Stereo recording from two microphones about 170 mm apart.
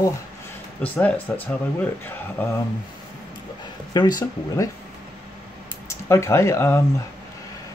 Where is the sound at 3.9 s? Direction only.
25° left (ahead or behind).